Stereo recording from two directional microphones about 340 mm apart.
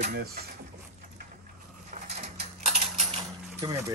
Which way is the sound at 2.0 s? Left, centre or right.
Centre.